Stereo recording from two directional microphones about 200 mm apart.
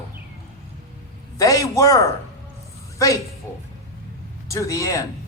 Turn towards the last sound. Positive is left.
turn(degrees=15)  # may be behind; listen again after turning